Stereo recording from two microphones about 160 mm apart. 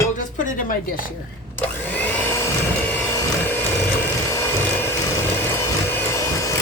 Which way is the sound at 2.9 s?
10° left (ahead or behind).